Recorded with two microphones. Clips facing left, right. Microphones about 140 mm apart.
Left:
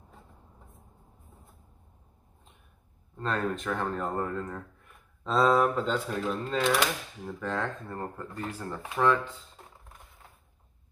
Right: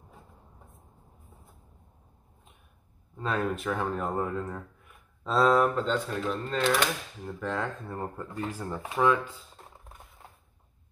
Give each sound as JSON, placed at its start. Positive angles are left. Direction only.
{"t": 3.2, "sound": "speech", "side_deg": -5}